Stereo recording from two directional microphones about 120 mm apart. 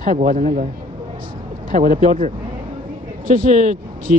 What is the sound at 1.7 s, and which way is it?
Speech, 90° right.